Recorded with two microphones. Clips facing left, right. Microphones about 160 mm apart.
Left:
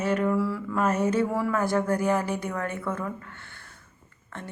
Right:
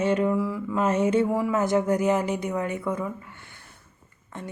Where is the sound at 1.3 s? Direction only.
15° right (ahead or behind).